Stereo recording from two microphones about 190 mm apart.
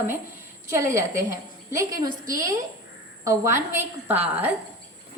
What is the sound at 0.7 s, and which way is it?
A woman's voice, 15° right (ahead or behind).